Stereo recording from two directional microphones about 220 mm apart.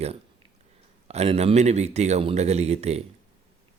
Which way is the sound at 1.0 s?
30° right (ahead or behind).